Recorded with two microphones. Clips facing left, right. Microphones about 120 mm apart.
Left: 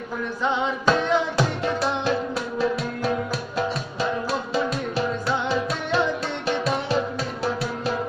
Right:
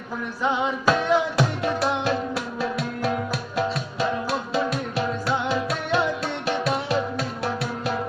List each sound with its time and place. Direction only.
0.4 s music: 10° right (ahead or behind)